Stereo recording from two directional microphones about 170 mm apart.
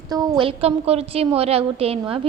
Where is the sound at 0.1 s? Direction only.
25° right (ahead or behind).